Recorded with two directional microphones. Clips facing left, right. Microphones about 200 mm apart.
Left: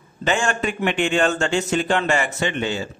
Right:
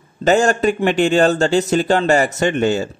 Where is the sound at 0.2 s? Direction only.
40° right (ahead or behind).